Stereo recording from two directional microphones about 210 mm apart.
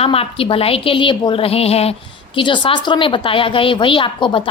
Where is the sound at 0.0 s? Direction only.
25° left (ahead or behind).